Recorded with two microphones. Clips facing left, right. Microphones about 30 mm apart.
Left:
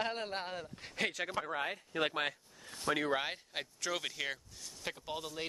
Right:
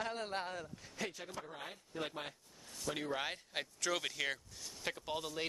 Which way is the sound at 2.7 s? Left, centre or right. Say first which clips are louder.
Left 7 dB; left.